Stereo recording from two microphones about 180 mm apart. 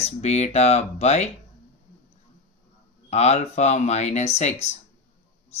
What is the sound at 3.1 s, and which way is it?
Speech, 35° left (ahead or behind).